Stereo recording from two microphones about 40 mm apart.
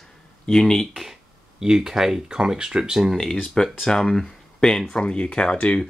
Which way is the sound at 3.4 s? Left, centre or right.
Centre.